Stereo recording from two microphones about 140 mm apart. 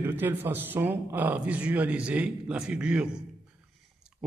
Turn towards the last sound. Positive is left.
turn(degrees=-5)  # may be behind; listen again after turning